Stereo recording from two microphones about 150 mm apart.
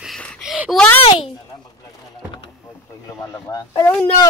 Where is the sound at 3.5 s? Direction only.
20° left (ahead or behind).